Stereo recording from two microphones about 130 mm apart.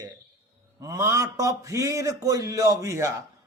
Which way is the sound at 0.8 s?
25° right (ahead or behind).